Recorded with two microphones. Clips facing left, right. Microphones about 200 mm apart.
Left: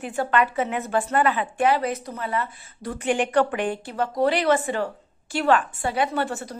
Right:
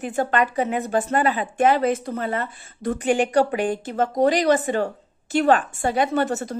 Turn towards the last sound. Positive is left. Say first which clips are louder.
# right 5 dB
turn(degrees=-45)  # may be behind; listen again after turning